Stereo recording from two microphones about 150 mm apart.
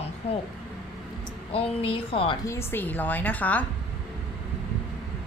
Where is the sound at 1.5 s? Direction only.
40° left (ahead or behind).